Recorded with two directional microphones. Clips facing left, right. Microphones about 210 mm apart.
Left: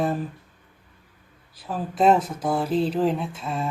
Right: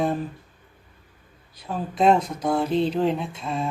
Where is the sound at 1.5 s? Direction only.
5° left (ahead or behind).